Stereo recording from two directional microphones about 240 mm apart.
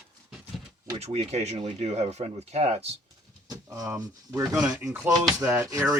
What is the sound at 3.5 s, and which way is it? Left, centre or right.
Speech, centre.